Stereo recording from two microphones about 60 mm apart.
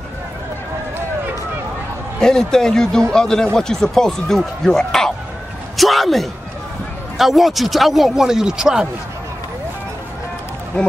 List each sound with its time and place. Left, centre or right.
2.1 s speech: centre
10.8 s speech: centre